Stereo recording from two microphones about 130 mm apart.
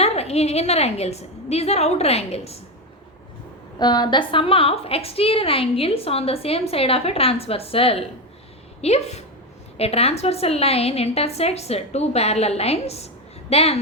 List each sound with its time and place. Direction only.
0.0 s a woman's voice: 55° left (ahead or behind)
3.8 s a woman's voice: 35° left (ahead or behind); by 13.7 s 50° left (ahead or behind)